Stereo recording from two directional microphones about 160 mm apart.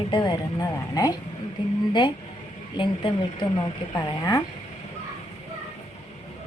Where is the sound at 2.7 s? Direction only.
30° left (ahead or behind).